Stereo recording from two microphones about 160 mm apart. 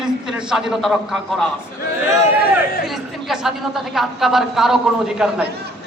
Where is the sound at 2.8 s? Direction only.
Centre (ahead or behind).